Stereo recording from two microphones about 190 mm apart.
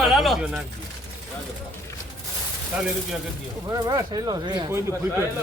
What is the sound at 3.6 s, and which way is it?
Speech, 20° right (ahead or behind).